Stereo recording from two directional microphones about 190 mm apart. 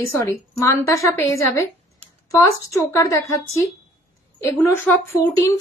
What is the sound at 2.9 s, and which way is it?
A woman's voice, 15° left (ahead or behind).